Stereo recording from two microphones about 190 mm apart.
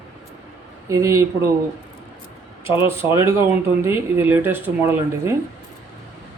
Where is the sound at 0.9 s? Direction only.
15° right (ahead or behind).